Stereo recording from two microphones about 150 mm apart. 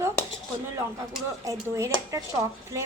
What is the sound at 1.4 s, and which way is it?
Speech, 20° right (ahead or behind).